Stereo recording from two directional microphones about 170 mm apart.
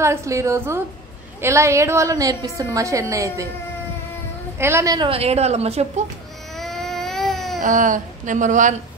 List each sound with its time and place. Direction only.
0.0 s a woman's voice: 15° right (ahead or behind)
4.6 s a woman's voice: 15° right (ahead or behind); by 6.0 s 40° right (ahead or behind)
6.5 s baby cry: centre (ahead or behind)
7.6 s a woman's voice: 50° right (ahead or behind)